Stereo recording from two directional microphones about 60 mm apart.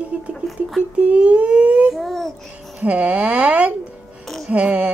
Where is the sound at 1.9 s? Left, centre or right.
Centre.